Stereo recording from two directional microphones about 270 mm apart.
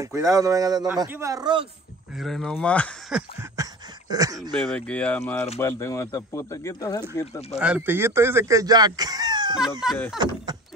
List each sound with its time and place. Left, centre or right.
0.0 s speech: centre
2.1 s speech: centre
4.6 s speech: centre
7.5 s speech: centre
9.8 s speech: centre
10.1 s speech: centre